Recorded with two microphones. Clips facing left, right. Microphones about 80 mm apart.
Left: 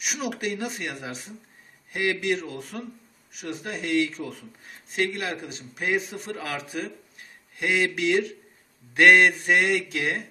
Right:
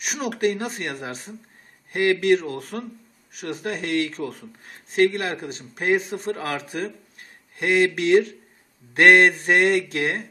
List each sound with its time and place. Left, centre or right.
0.0 s a man's voice: right